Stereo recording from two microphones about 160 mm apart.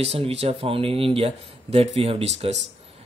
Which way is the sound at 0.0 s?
40° right (ahead or behind).